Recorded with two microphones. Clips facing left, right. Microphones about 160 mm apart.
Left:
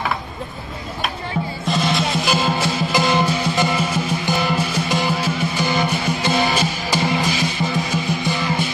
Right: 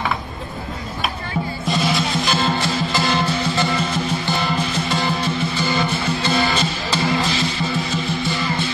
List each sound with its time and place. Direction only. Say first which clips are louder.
1.7 s music: left 1 dB; centre (ahead or behind)